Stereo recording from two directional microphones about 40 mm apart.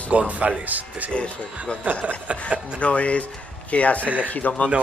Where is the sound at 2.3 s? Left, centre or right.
Right.